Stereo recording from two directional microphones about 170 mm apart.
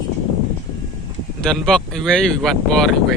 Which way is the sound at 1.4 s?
5° left (ahead or behind).